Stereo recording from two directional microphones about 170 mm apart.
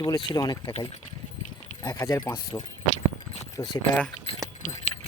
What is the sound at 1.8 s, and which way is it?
Speech, 20° left (ahead or behind).